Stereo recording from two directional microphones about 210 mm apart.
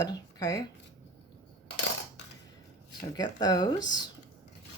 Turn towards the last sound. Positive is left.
turn(degrees=20)  # may be behind; listen again after turning